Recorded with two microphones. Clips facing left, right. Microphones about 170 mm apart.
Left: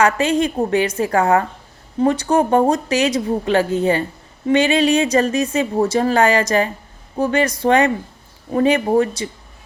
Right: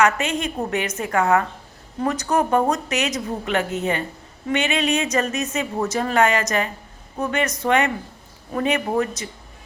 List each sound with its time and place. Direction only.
0.0 s a woman's voice: 30° left (ahead or behind)